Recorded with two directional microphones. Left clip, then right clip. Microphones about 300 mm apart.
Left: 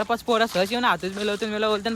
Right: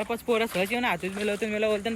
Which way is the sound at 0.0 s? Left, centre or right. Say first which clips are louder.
Left 5 dB; centre.